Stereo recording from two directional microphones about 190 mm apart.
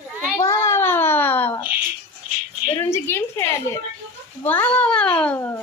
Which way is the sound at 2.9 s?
15° left (ahead or behind).